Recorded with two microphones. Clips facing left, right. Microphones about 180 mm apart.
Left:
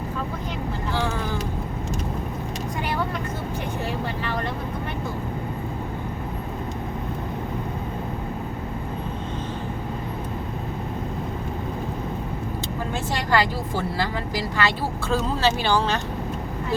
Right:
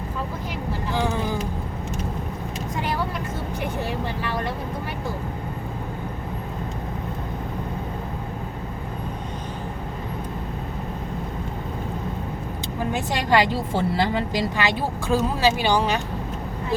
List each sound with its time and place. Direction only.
0.9 s vehicle: 15° right (ahead or behind)
12.9 s speech: 20° right (ahead or behind)